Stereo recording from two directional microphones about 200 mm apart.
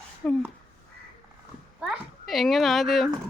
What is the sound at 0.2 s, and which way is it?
Speech, 5° left (ahead or behind).